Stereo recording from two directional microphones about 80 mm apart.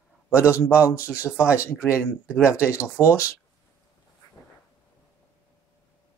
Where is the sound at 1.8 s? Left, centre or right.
Left.